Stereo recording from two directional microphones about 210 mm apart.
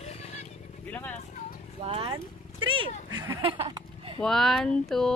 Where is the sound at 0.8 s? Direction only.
10° left (ahead or behind).